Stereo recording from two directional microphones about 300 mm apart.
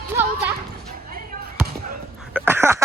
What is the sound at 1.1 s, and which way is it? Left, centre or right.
Basketball bounce, right.